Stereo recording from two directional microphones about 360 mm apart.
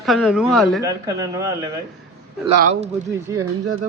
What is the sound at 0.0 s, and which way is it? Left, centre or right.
Speech, centre.